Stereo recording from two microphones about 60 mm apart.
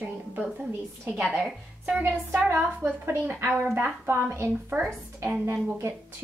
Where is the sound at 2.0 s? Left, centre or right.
Right.